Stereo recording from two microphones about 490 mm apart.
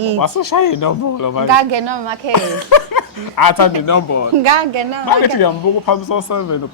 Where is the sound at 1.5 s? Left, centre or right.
Right.